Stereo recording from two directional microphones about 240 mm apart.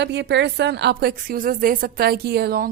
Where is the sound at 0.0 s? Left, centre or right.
Right.